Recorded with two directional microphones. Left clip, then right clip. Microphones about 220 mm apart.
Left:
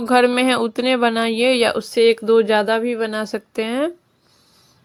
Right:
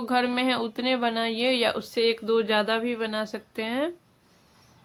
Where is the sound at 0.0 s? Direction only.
35° left (ahead or behind).